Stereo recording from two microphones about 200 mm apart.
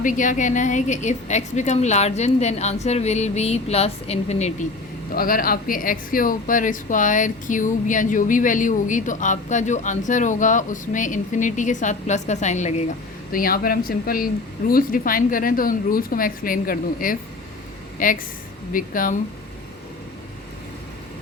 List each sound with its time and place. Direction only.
0.0 s speech: 40° left (ahead or behind)
5.1 s speech: 45° left (ahead or behind)
13.3 s a woman's voice: 45° left (ahead or behind)